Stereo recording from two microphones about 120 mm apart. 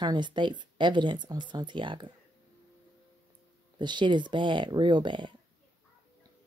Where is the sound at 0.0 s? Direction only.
40° right (ahead or behind).